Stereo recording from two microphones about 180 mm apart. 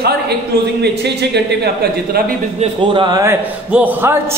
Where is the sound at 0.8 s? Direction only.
70° right (ahead or behind).